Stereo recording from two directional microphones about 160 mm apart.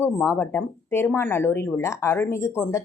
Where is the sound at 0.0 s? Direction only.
15° left (ahead or behind).